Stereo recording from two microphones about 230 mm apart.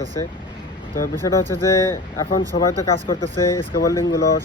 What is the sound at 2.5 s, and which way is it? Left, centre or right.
Speech, left.